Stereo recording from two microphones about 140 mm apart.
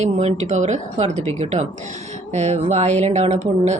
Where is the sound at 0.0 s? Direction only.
55° right (ahead or behind).